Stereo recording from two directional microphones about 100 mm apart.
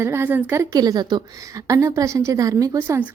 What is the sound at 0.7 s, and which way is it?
Speech, 40° right (ahead or behind).